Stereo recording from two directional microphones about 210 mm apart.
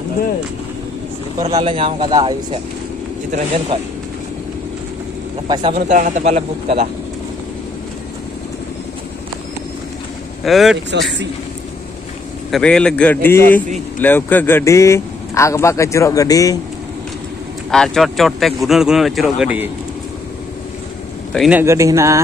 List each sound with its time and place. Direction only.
1.4 s speech: 20° right (ahead or behind)
5.5 s speech: 20° right (ahead or behind)
5.8 s a man's voice: 35° right (ahead or behind)
10.4 s speech: centre (ahead or behind)
12.4 s speech: centre (ahead or behind)
17.6 s speech: centre (ahead or behind)
21.3 s speech: 5° right (ahead or behind)